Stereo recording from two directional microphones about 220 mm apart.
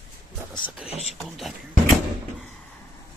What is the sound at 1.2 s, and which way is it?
Speech, centre (ahead or behind).